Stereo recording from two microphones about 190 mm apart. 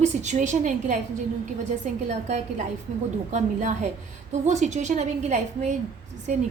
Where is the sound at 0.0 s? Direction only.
35° right (ahead or behind).